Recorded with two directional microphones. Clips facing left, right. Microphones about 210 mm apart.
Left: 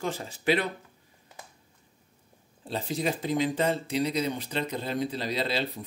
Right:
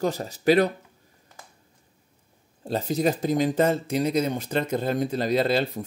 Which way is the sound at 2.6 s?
45° right (ahead or behind).